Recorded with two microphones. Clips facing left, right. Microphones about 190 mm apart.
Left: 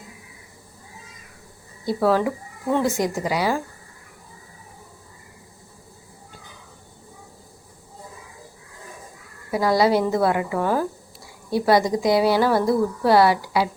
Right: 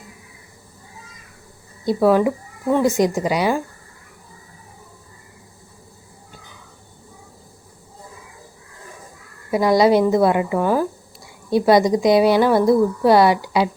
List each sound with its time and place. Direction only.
1.8 s a woman's voice: 20° right (ahead or behind)
9.5 s a woman's voice: 20° right (ahead or behind)